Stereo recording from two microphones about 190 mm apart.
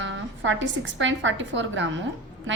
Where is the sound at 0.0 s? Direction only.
75° right (ahead or behind).